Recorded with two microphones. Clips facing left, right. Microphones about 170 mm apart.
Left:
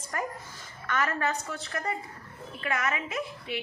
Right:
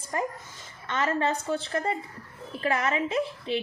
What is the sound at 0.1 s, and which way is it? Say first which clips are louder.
A woman's voice: right 3 dB; 25° right (ahead or behind).